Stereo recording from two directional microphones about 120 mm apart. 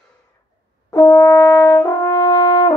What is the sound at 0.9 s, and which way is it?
Brass instrument, 25° left (ahead or behind).